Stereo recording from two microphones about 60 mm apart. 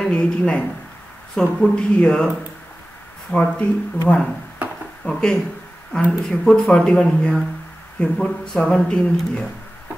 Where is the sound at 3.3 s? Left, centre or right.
Centre.